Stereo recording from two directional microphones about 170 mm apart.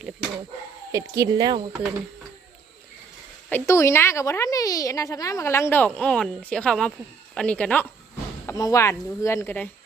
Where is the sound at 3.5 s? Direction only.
15° left (ahead or behind).